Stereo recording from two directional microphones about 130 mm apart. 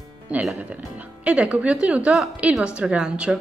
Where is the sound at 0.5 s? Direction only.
10° right (ahead or behind).